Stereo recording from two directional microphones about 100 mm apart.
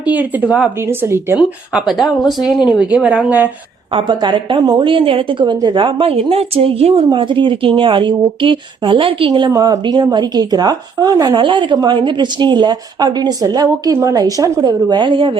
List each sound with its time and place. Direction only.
0.0 s a woman's voice: 15° right (ahead or behind)
1.7 s a woman's voice: centre (ahead or behind)
3.9 s a woman's voice: 50° right (ahead or behind); by 7.0 s 70° right (ahead or behind)
7.1 s speech: 55° right (ahead or behind)
9.5 s speech: 35° right (ahead or behind)
11.4 s speech: 55° right (ahead or behind)